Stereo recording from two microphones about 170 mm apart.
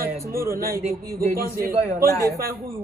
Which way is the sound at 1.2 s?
60° right (ahead or behind).